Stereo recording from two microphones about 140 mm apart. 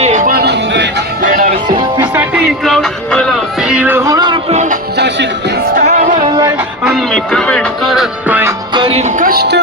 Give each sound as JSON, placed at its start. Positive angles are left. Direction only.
{"t": 0.0, "sound": "music", "side_deg": -65}
{"t": 2.0, "sound": "music", "side_deg": -15}
{"t": 2.6, "sound": "a sound", "side_deg": 5}
{"t": 4.4, "sound": "music", "side_deg": -55}
{"t": 6.8, "sound": "music", "side_deg": 0}
{"t": 8.3, "sound": "music", "side_deg": -15}
{"t": 8.7, "sound": "music", "side_deg": -40}
{"t": 9.1, "sound": "music", "side_deg": -85}